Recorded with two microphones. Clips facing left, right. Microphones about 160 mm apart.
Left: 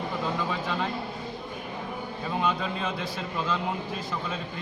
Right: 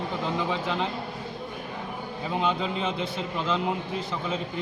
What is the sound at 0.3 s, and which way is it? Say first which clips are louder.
Speech: right 2 dB; 20° right (ahead or behind).